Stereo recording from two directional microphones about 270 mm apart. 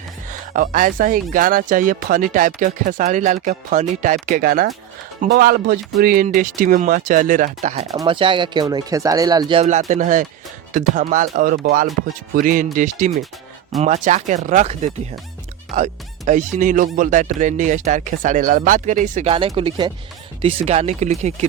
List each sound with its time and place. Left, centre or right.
0.3 s speech: right